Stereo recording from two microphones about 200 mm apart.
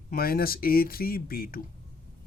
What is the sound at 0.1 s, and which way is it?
Speech, 50° left (ahead or behind).